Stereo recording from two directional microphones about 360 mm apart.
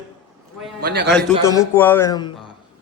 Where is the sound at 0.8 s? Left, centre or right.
Right.